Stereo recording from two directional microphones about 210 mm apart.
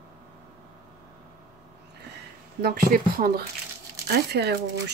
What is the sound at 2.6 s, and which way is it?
Speech, 45° right (ahead or behind).